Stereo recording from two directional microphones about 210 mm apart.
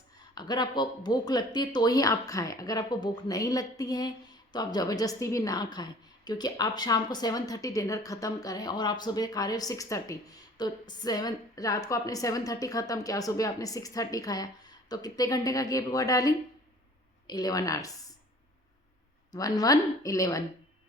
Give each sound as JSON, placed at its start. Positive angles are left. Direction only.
{"t": 0.3, "sound": "a woman's voice", "side_deg": 20}
{"t": 19.3, "sound": "a woman's voice", "side_deg": 15}